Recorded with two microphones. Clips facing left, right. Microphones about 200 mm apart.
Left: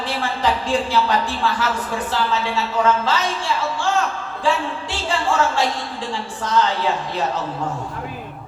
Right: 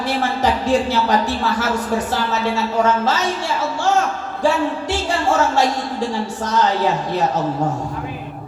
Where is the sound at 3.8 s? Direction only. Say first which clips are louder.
Right 3 dB; 45° right (ahead or behind).